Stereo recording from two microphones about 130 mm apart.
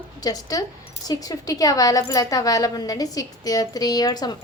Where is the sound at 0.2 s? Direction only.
30° left (ahead or behind).